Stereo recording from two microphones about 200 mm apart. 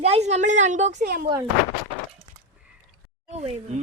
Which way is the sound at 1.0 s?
50° right (ahead or behind).